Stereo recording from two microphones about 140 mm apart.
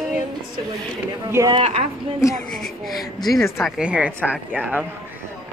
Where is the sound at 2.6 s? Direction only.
Centre (ahead or behind).